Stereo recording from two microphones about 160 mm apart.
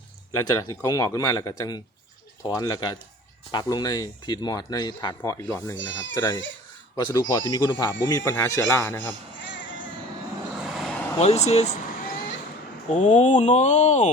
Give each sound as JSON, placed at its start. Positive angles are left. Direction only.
{"t": 0.3, "sound": "speech", "side_deg": 25}
{"t": 10.6, "sound": "vehicle", "side_deg": 0}
{"t": 11.2, "sound": "speech", "side_deg": 40}
{"t": 12.9, "sound": "speech", "side_deg": 45}